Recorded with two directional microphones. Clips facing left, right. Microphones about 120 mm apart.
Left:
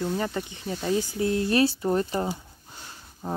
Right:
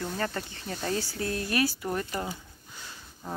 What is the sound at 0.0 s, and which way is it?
Speech, 15° left (ahead or behind).